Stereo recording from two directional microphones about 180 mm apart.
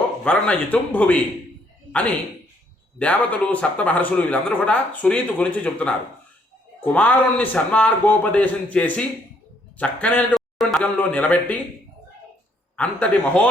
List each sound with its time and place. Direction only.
0.3 s speech: 5° left (ahead or behind)
6.8 s a man's voice: 10° left (ahead or behind)
12.7 s speech: 5° left (ahead or behind)